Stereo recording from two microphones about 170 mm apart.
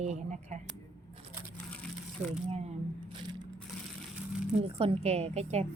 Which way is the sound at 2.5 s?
35° right (ahead or behind).